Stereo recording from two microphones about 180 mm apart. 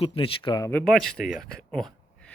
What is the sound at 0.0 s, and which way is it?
Speech, 30° left (ahead or behind).